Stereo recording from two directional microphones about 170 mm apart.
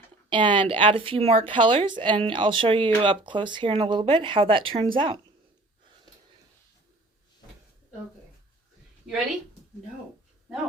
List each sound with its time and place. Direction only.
0.3 s a woman's voice: 30° right (ahead or behind)